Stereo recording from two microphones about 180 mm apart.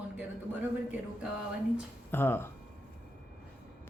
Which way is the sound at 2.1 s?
10° left (ahead or behind).